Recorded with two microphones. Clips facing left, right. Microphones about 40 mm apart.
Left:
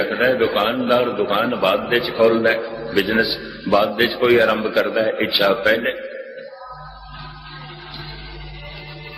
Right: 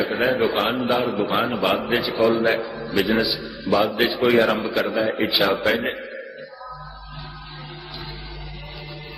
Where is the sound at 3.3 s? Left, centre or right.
Left.